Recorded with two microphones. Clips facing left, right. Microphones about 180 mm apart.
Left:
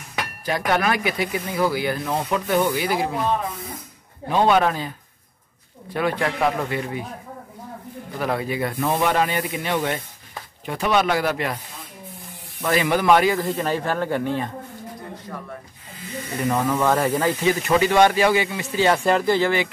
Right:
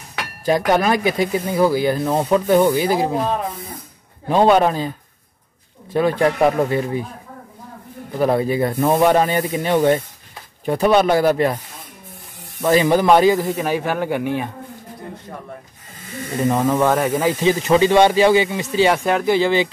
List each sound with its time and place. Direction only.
0.5 s speech: 30° right (ahead or behind)
5.9 s speech: 30° right (ahead or behind)
8.2 s speech: 30° right (ahead or behind)
12.6 s speech: 25° right (ahead or behind)
13.6 s speech: 5° right (ahead or behind)
16.3 s speech: 25° right (ahead or behind)
16.7 s speech: 10° right (ahead or behind)
17.5 s speech: 25° right (ahead or behind)
18.9 s speech: 5° right (ahead or behind)
19.4 s speech: 20° right (ahead or behind)